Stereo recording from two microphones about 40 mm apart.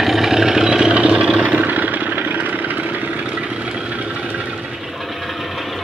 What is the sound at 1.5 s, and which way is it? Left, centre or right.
Vehicle, right.